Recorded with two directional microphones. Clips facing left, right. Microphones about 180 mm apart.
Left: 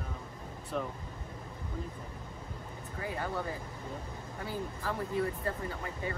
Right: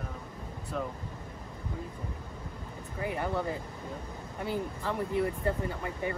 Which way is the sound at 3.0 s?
20° right (ahead or behind).